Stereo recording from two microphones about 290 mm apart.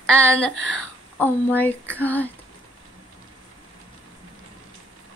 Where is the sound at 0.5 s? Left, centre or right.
Left.